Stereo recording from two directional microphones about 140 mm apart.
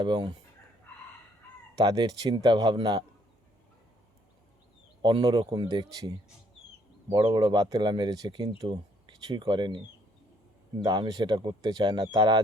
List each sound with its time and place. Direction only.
0.0 s speech: 35° right (ahead or behind)
1.7 s speech: 25° right (ahead or behind)
5.0 s speech: 35° right (ahead or behind)
10.8 s speech: 30° right (ahead or behind)